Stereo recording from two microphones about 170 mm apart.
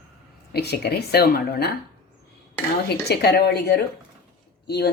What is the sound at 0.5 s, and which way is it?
A woman's voice, 75° left (ahead or behind).